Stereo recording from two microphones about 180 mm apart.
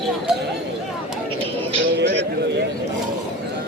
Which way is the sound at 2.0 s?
70° right (ahead or behind).